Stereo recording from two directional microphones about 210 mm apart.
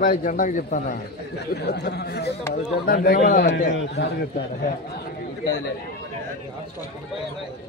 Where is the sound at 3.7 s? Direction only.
50° left (ahead or behind).